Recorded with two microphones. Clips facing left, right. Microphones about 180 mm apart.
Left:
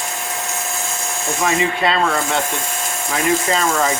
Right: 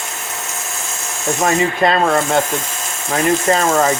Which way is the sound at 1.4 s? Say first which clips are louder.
Right 3 dB; 45° right (ahead or behind).